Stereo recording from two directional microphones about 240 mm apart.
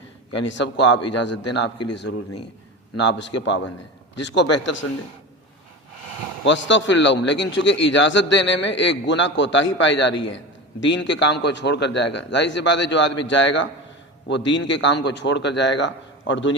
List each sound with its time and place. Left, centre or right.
0.4 s a man's voice: left
0.9 s a man's voice: left
3.0 s a man's voice: left
6.4 s a man's voice: left